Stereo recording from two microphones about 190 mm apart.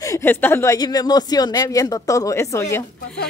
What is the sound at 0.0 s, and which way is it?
A woman's voice, 15° left (ahead or behind).